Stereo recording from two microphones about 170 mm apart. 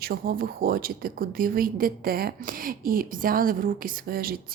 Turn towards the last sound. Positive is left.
turn(degrees=-60)  # may be behind; listen again after turning